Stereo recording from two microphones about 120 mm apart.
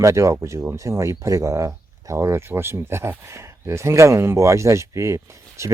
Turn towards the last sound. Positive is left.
turn(degrees=-25)  # may be behind; listen again after turning